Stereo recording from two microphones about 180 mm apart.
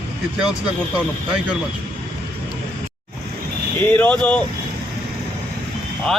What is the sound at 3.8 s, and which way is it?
Speech, 10° left (ahead or behind).